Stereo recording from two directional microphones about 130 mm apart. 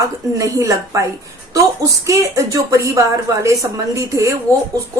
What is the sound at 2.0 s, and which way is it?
Speech, 25° right (ahead or behind).